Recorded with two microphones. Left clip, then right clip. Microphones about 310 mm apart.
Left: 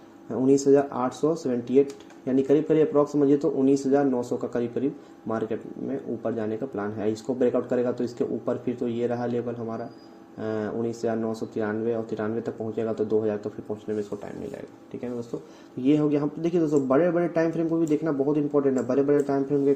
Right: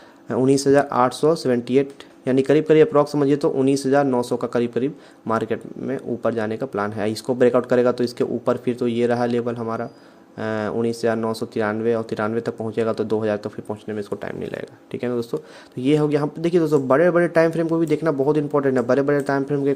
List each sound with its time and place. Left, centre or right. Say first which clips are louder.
0.3 s speech: right 3 dB; right
6.2 s speech: right 7 dB; right
14.5 s speech: right 7 dB; right